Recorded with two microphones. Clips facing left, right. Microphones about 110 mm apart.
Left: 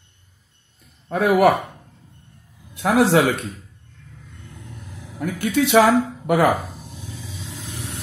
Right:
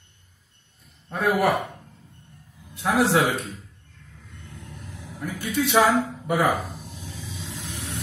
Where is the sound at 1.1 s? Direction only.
90° left.